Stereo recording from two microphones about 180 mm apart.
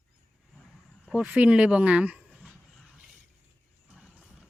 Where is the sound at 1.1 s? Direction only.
5° right (ahead or behind).